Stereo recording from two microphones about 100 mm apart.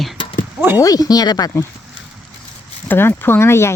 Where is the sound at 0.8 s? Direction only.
35° left (ahead or behind).